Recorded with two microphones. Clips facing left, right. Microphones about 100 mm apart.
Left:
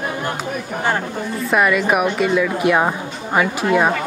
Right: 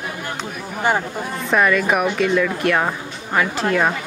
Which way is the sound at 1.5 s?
10° left (ahead or behind).